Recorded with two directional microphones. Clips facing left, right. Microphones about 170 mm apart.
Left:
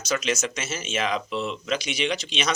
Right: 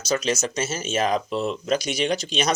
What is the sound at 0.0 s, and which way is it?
Speech, 35° right (ahead or behind).